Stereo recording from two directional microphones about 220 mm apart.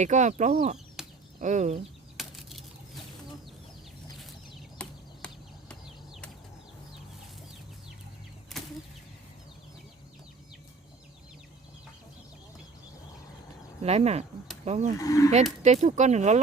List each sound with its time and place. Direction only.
0.0 s speech: 35° right (ahead or behind)
1.0 s a sound: centre (ahead or behind)
1.4 s speech: 35° right (ahead or behind)
2.1 s bird flight: centre (ahead or behind)
4.8 s a sound: 5° left (ahead or behind)
8.6 s a sound: centre (ahead or behind)
13.8 s speech: 30° right (ahead or behind)
14.9 s speech: 15° left (ahead or behind)
15.6 s speech: 30° right (ahead or behind)